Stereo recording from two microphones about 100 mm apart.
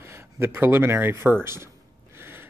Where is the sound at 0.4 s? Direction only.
25° right (ahead or behind).